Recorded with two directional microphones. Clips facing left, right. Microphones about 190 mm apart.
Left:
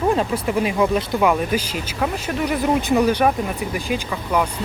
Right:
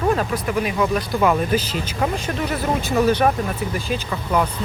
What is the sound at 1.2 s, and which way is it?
Speech, 10° left (ahead or behind).